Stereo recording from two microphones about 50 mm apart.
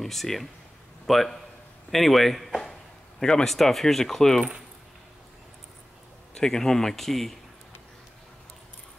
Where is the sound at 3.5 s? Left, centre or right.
Centre.